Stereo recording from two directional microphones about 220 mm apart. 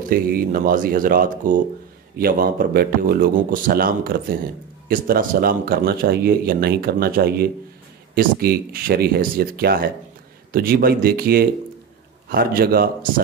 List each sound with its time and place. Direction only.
0.1 s speech: 40° right (ahead or behind)